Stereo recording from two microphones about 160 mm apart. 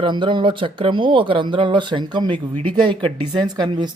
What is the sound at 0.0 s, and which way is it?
Speech, 30° right (ahead or behind).